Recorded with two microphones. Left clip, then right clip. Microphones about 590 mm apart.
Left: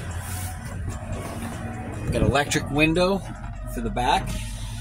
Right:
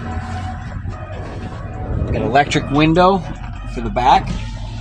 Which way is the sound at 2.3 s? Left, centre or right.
Left.